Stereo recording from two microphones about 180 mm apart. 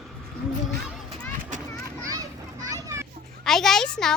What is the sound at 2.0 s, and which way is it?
Children playing, 20° right (ahead or behind).